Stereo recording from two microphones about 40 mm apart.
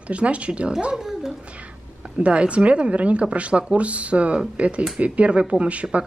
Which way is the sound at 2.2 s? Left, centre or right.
Right.